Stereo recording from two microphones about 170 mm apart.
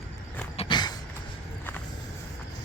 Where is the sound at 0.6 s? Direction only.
25° left (ahead or behind).